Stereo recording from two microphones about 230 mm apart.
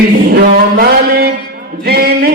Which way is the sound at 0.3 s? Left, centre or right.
Right.